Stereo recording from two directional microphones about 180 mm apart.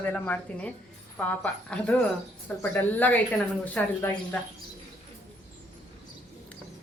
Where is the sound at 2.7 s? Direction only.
10° left (ahead or behind).